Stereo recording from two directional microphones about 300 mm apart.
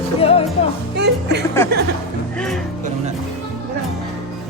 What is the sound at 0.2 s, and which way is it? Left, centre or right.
Music, centre.